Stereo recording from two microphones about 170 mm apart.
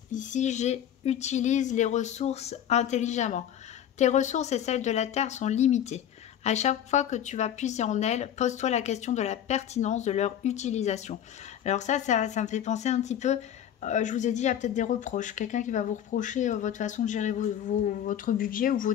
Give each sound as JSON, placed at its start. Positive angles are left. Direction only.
{"t": 0.1, "sound": "speech", "side_deg": 45}